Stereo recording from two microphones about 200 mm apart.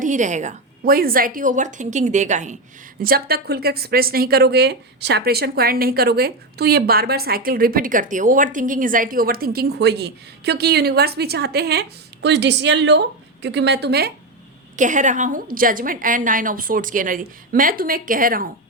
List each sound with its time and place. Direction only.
0.0 s a woman's voice: 40° right (ahead or behind)
3.0 s speech: 50° right (ahead or behind)
14.8 s speech: 40° right (ahead or behind)